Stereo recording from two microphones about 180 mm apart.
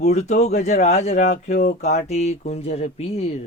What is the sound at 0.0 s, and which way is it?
Speech, 40° left (ahead or behind).